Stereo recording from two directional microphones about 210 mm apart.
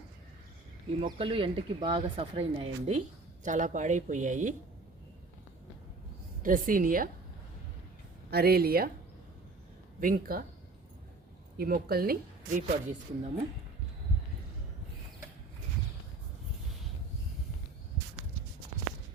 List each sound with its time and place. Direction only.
1.2 s speech: 25° right (ahead or behind)
6.4 s speech: 40° right (ahead or behind)
8.3 s speech: 50° right (ahead or behind)
10.0 s speech: 45° right (ahead or behind)
11.5 s speech: 45° right (ahead or behind)